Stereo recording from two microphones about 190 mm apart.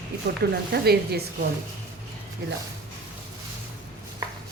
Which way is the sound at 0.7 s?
55° right (ahead or behind).